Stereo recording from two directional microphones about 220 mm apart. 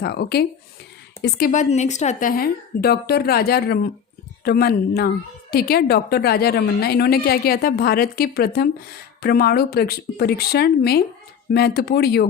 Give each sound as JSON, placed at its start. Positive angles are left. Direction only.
{"t": 0.0, "sound": "a woman's voice", "side_deg": 45}